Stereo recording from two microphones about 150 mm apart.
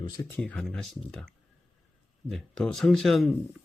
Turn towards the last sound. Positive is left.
turn(degrees=0)  # may be behind; listen again after turning